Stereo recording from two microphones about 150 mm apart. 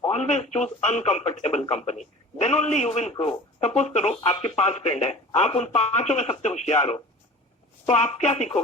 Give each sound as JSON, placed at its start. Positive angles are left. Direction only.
{"t": 0.1, "sound": "a man's voice", "side_deg": 45}